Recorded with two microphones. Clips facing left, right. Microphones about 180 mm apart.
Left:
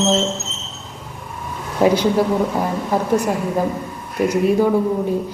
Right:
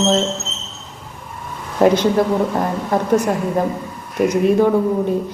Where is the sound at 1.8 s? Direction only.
10° left (ahead or behind).